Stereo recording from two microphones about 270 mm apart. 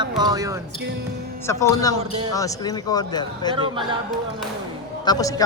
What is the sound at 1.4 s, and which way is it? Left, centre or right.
Speech, centre.